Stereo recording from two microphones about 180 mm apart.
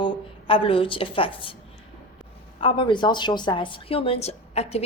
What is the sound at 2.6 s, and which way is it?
A woman's voice, 30° left (ahead or behind).